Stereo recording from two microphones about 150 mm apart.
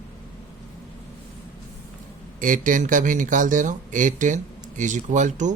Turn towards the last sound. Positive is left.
turn(degrees=-55)  # may be behind; listen again after turning